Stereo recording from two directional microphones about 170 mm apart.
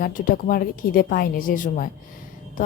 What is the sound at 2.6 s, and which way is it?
Music, 50° left (ahead or behind).